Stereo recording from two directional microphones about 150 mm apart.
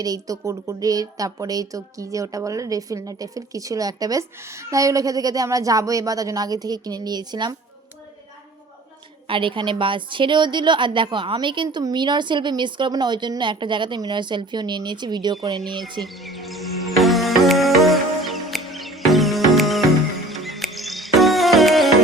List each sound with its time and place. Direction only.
0.0 s speech: 25° right (ahead or behind)
9.2 s a woman's voice: 35° right (ahead or behind)
15.8 s music: centre (ahead or behind)